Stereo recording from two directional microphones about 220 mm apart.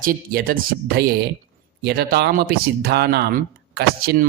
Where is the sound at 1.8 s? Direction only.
45° right (ahead or behind).